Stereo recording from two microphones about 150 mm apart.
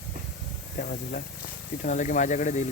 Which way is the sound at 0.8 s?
55° left (ahead or behind).